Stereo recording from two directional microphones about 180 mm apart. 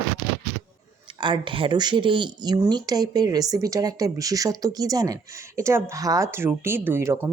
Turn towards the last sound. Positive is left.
turn(degrees=-15)  # may be behind; listen again after turning